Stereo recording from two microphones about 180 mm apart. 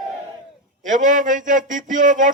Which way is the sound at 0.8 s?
45° right (ahead or behind).